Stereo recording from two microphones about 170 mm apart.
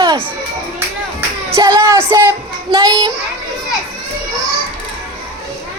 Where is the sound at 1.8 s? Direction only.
15° right (ahead or behind).